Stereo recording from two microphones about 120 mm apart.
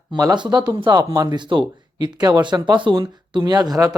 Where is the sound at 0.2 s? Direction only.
35° right (ahead or behind).